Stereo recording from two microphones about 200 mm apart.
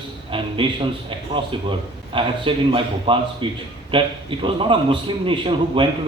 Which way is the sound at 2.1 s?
25° right (ahead or behind).